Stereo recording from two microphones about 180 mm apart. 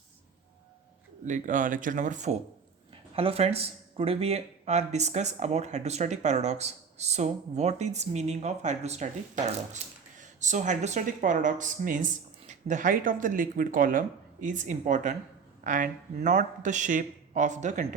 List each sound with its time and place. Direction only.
1.2 s speech: 45° right (ahead or behind)